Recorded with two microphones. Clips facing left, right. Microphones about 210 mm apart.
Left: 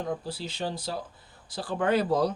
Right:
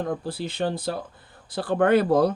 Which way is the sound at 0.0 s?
55° right (ahead or behind).